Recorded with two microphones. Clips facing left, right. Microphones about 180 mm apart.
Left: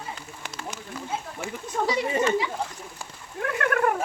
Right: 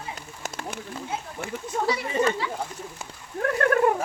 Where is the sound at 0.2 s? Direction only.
45° right (ahead or behind).